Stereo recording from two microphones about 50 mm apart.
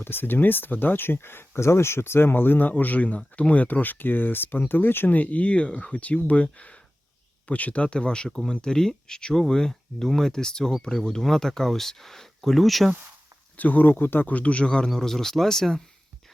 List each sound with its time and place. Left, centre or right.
0.0 s speech: left; by 12.9 s centre
13.6 s speech: left
14.8 s speech: centre